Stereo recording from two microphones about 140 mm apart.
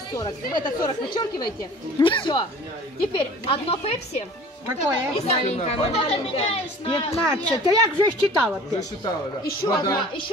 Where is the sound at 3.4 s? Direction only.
45° left (ahead or behind).